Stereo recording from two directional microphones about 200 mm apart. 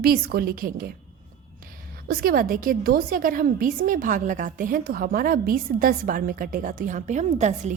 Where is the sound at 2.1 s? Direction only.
45° right (ahead or behind).